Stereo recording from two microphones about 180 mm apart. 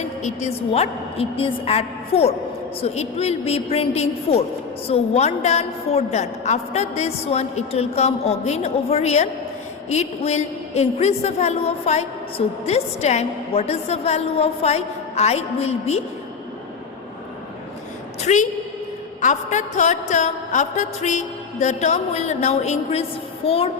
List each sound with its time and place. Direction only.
0.2 s a woman's voice: 40° left (ahead or behind)
18.2 s a woman's voice: 40° left (ahead or behind)